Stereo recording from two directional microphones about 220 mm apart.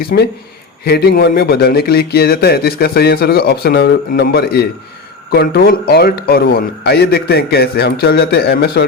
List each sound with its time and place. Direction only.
0.0 s speech: 45° left (ahead or behind)